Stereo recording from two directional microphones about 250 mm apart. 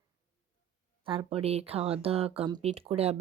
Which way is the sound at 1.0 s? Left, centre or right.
Right.